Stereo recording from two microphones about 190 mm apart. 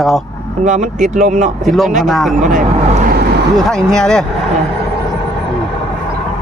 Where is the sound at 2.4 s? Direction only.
40° right (ahead or behind).